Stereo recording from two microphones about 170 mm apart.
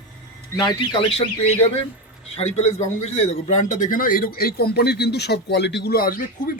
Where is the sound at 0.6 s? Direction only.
25° left (ahead or behind).